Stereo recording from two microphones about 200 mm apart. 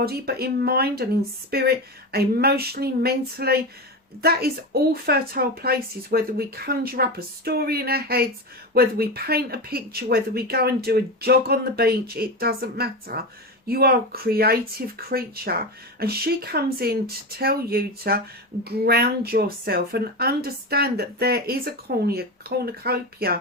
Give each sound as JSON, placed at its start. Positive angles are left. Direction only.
{"t": 0.0, "sound": "a woman's voice", "side_deg": -50}